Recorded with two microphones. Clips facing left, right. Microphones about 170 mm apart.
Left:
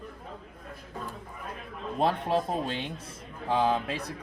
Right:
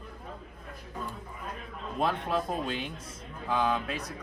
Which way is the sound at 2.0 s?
35° left (ahead or behind).